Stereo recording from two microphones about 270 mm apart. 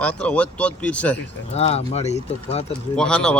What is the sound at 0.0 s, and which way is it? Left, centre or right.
Speech, centre.